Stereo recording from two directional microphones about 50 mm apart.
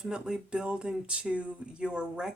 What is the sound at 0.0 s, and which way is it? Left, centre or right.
Speech, centre.